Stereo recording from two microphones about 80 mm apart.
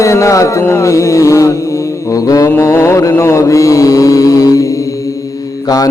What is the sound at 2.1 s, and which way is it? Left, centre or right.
Mantra, left.